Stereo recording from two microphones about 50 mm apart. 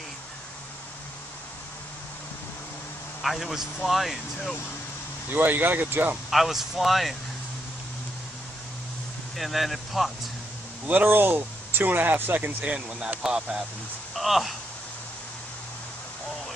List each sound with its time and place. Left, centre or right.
3.2 s speech: centre
5.3 s speech: right
6.3 s speech: centre
9.4 s speech: centre
11.1 s speech: right
12.6 s speech: centre
14.1 s speech: centre